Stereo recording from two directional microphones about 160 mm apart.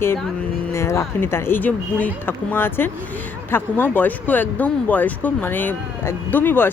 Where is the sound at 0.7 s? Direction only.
15° left (ahead or behind).